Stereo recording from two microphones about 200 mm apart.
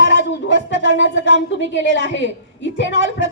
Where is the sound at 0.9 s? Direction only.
65° left (ahead or behind).